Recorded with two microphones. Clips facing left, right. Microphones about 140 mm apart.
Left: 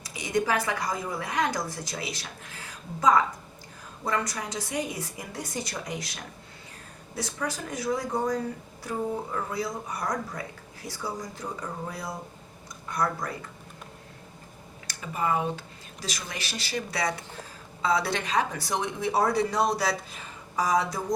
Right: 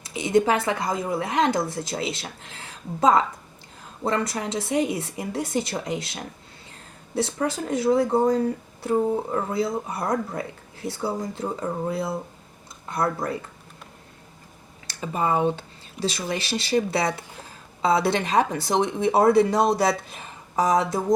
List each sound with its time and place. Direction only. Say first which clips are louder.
0.0 s a woman's voice: right 7 dB; 25° right (ahead or behind)
14.8 s speech: right 4 dB; 30° right (ahead or behind)
20.6 s speech: right 4 dB; 25° right (ahead or behind)